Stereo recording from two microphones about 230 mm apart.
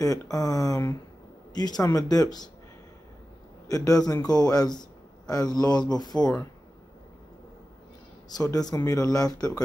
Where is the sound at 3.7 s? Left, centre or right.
Centre.